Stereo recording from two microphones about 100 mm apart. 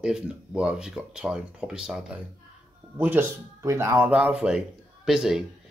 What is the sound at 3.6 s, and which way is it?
Speech, 30° right (ahead or behind).